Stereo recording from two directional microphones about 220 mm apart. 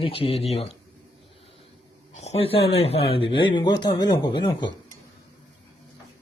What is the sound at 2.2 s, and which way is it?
A man's voice, 25° left (ahead or behind).